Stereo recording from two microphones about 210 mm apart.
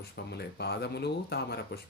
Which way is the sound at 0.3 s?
50° left (ahead or behind).